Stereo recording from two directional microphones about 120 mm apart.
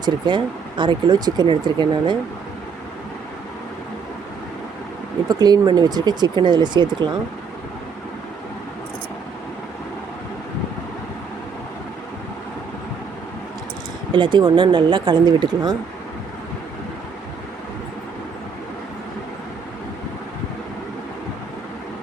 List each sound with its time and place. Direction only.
0.0 s speech: 40° right (ahead or behind)
5.3 s speech: 35° right (ahead or behind)
14.2 s speech: 40° right (ahead or behind)